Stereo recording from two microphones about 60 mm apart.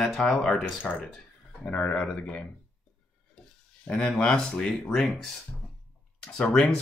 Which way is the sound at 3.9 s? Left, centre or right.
Centre.